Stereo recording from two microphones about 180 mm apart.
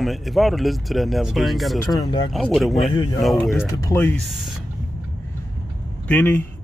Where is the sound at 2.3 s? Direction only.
Centre (ahead or behind).